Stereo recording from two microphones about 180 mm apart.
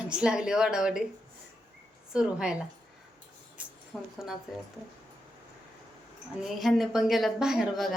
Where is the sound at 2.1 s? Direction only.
5° right (ahead or behind).